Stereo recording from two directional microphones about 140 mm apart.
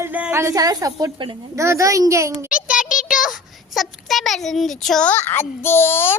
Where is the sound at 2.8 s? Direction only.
75° left (ahead or behind).